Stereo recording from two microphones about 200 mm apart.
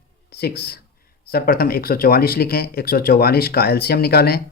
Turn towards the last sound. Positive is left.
turn(degrees=50)  # may be behind; listen again after turning